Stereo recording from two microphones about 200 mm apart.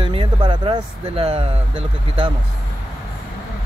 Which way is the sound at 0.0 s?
25° right (ahead or behind).